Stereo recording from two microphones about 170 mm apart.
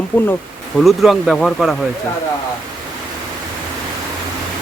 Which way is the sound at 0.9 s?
Centre (ahead or behind).